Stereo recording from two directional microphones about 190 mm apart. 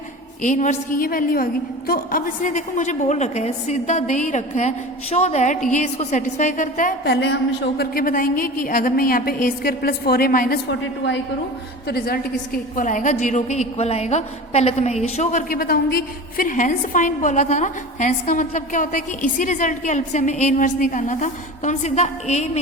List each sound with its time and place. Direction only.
0.4 s a woman's voice: 40° left (ahead or behind)
10.7 s a woman's voice: 70° left (ahead or behind)
11.9 s a woman's voice: 55° left (ahead or behind)
12.7 s a woman's voice: 45° left (ahead or behind)